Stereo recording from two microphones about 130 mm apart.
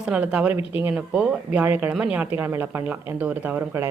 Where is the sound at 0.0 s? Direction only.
10° right (ahead or behind).